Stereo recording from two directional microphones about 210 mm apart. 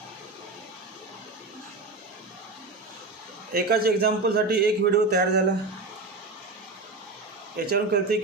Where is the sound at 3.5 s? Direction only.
45° right (ahead or behind).